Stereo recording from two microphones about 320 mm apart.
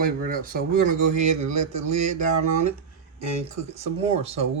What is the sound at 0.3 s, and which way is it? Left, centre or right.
Speech, right.